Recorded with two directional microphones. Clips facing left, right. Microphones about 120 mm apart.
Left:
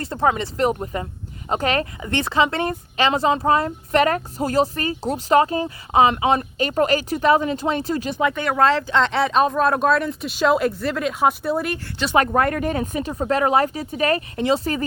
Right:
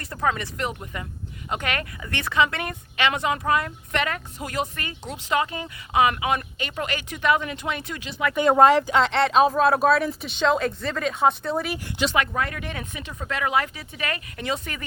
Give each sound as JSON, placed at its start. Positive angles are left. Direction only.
{"t": 0.0, "sound": "speech", "side_deg": 30}
{"t": 8.4, "sound": "speech", "side_deg": -15}
{"t": 12.1, "sound": "speech", "side_deg": 45}